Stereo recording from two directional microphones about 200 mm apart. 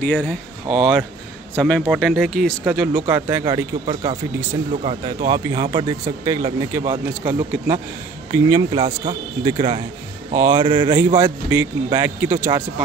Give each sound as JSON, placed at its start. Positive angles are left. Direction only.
{"t": 0.0, "sound": "a man's voice", "side_deg": 5}
{"t": 3.1, "sound": "speech", "side_deg": -10}
{"t": 5.3, "sound": "speech", "side_deg": -20}
{"t": 10.3, "sound": "speech", "side_deg": -15}
{"t": 10.6, "sound": "speech", "side_deg": -25}
{"t": 10.9, "sound": "speech", "side_deg": -10}